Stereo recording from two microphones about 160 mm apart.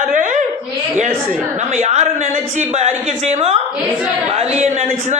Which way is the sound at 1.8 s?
45° right (ahead or behind).